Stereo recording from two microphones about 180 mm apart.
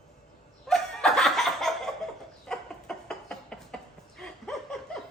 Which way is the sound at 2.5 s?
5° left (ahead or behind).